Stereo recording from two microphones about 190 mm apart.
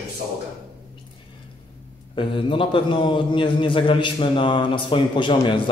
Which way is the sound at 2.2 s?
25° left (ahead or behind).